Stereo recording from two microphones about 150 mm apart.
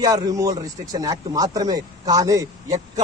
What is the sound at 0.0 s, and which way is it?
A man's voice, 25° right (ahead or behind).